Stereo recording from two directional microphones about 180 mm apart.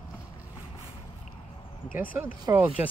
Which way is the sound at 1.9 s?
50° left (ahead or behind).